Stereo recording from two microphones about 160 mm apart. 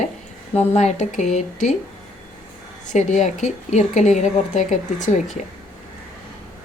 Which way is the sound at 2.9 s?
50° left (ahead or behind).